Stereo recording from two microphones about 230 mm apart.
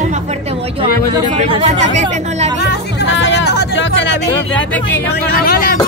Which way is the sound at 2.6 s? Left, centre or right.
Left.